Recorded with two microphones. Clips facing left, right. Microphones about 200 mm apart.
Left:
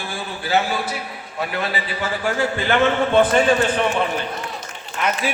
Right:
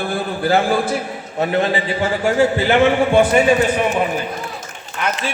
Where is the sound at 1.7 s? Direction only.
25° right (ahead or behind).